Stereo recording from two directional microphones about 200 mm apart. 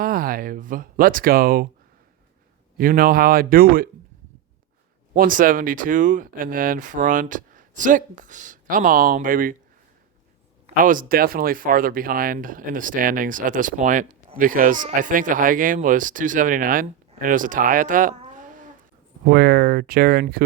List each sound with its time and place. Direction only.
0.0 s a sound: 45° right (ahead or behind)
2.7 s speech: 45° right (ahead or behind)
5.1 s speech: 45° right (ahead or behind)
10.8 s speech: 45° right (ahead or behind)